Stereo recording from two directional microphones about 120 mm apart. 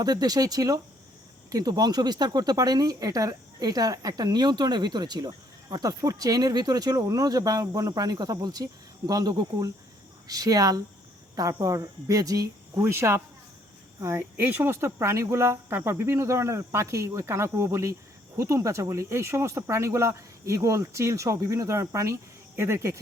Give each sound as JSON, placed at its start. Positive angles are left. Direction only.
{"t": 0.0, "sound": "speech", "side_deg": -35}